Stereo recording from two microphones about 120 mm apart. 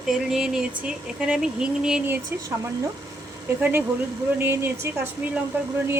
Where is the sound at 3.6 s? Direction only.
15° right (ahead or behind).